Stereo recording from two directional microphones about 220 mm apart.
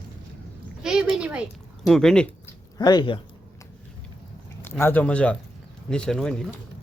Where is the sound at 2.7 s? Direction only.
20° left (ahead or behind).